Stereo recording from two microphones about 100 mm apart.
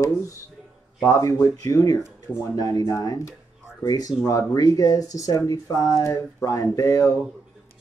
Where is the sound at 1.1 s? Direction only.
30° left (ahead or behind).